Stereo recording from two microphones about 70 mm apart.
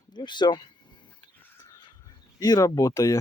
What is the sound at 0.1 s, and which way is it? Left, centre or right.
Speech, left.